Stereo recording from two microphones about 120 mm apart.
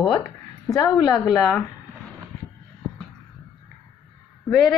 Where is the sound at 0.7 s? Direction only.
30° left (ahead or behind).